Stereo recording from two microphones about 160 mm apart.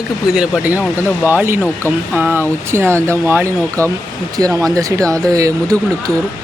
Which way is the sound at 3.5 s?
10° left (ahead or behind).